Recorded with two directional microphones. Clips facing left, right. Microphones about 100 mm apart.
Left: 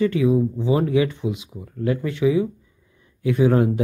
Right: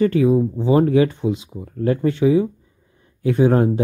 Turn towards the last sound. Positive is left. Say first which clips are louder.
# right 2 dB
turn(degrees=-35)  # may be behind; listen again after turning